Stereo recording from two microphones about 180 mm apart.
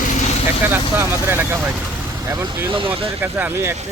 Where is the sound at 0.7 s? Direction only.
10° right (ahead or behind); by 3.1 s 30° right (ahead or behind).